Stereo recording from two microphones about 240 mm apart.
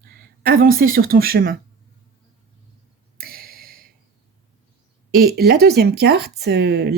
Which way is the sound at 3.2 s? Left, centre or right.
Right.